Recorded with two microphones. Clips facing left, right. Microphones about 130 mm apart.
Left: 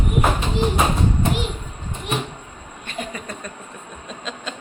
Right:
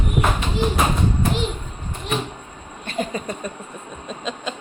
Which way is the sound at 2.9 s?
35° right (ahead or behind).